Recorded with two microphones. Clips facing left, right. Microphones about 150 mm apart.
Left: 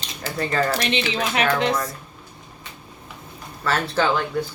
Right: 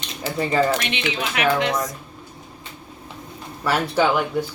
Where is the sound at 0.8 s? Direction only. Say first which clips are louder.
Left 2 dB; 35° left (ahead or behind).